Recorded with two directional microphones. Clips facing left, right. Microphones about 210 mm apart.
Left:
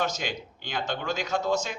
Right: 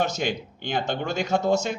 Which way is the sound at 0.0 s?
50° right (ahead or behind).